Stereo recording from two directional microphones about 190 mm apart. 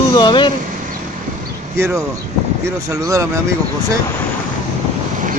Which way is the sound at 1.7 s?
15° right (ahead or behind).